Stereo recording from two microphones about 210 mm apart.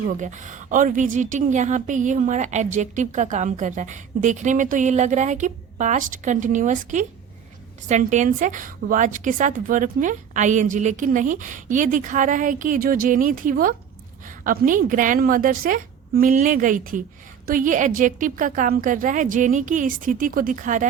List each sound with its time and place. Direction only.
0.0 s a woman's voice: 35° right (ahead or behind)